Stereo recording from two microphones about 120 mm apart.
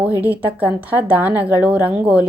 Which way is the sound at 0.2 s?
15° right (ahead or behind).